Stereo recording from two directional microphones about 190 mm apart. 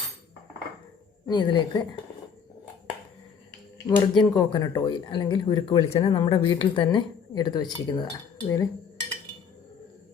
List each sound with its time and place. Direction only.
1.3 s speech: 25° left (ahead or behind)
3.8 s speech: 25° left (ahead or behind)